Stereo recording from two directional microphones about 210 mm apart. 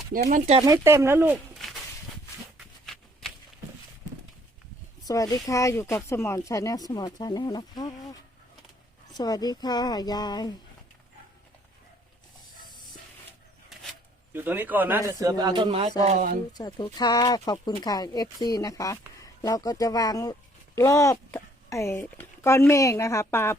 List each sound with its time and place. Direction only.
0.1 s speech: 40° right (ahead or behind)
0.6 s speech: 15° right (ahead or behind)
2.6 s shuffling cards: centre (ahead or behind)
5.0 s speech: 15° left (ahead or behind)
14.3 s speech: 10° right (ahead or behind); by 15.9 s 25° right (ahead or behind)
16.0 s speech: 40° right (ahead or behind)
16.5 s speech: 20° left (ahead or behind)